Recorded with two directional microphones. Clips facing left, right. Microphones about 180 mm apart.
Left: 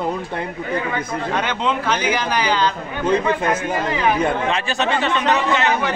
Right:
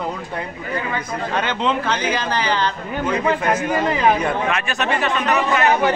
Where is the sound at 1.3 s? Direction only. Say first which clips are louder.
Right 1 dB; 15° left (ahead or behind).